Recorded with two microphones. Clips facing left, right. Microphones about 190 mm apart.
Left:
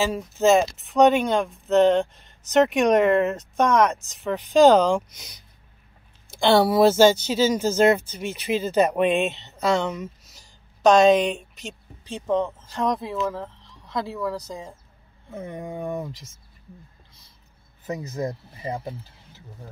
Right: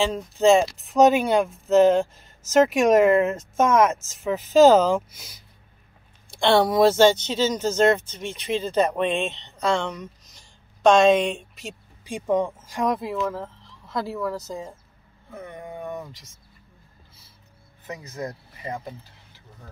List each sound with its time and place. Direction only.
0.0 s speech: 5° left (ahead or behind)
15.2 s speech: 25° left (ahead or behind)